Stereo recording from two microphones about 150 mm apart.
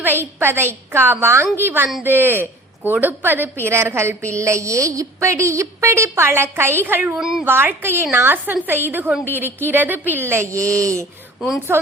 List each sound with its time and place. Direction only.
0.0 s a woman's voice: 15° right (ahead or behind)
11.3 s speech: centre (ahead or behind)